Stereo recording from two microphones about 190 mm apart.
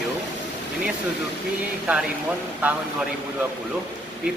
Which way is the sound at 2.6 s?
5° right (ahead or behind).